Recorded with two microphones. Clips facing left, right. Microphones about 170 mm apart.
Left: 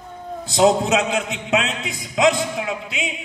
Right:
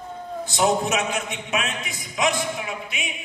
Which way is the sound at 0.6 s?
90° left.